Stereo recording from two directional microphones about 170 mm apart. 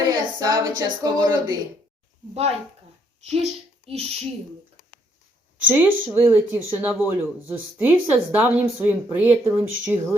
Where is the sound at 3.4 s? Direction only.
35° right (ahead or behind).